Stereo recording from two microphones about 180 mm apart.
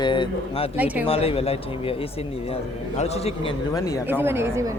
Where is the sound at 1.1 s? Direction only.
35° left (ahead or behind).